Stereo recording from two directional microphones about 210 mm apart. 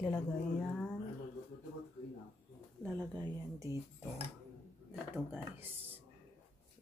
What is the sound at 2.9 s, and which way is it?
Speech, 20° right (ahead or behind).